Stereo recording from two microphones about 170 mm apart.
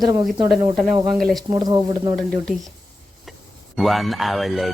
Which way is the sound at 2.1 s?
5° left (ahead or behind).